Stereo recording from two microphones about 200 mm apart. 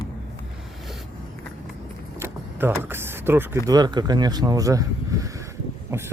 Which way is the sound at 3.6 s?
20° right (ahead or behind).